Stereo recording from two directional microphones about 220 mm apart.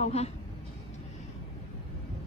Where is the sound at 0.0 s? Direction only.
30° left (ahead or behind).